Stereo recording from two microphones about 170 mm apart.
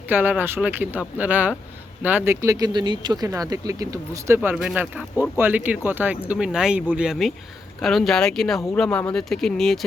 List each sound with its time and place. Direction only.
0.1 s speech: 10° right (ahead or behind)
4.4 s speech: 5° right (ahead or behind)